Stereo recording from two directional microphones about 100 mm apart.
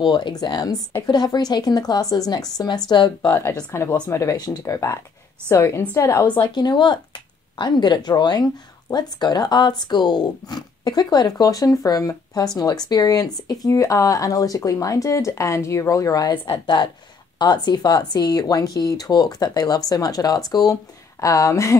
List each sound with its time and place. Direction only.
0.0 s speech: 50° left (ahead or behind)
2.9 s speech: 50° left (ahead or behind)
3.3 s a woman's voice: 20° left (ahead or behind)
6.5 s speech: 45° left (ahead or behind)
16.5 s speech: 50° left (ahead or behind); by 21.7 s 30° left (ahead or behind)